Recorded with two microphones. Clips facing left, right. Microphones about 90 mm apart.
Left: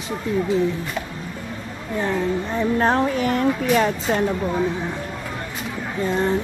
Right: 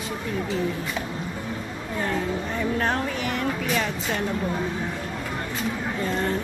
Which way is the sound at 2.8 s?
35° left (ahead or behind).